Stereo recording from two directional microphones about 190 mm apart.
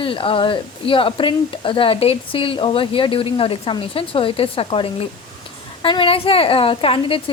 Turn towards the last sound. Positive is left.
turn(degrees=30)  # may be behind; listen again after turning